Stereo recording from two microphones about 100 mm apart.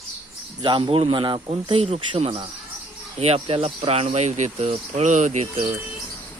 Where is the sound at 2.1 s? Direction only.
65° right (ahead or behind).